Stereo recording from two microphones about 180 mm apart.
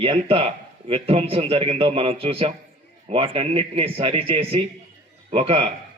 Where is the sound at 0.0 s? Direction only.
30° right (ahead or behind).